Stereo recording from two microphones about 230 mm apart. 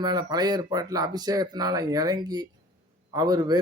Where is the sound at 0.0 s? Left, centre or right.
Centre.